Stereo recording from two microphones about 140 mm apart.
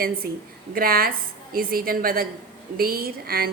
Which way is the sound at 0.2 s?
90° right.